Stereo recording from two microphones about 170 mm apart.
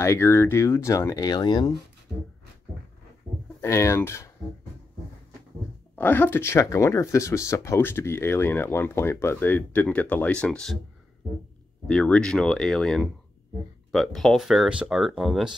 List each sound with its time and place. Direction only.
0.0 s speech: 15° left (ahead or behind)
3.6 s speech: 15° left (ahead or behind)
5.9 s speech: 10° left (ahead or behind)
11.9 s speech: 5° left (ahead or behind)